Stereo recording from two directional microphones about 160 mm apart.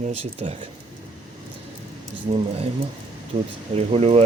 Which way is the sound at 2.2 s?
40° right (ahead or behind).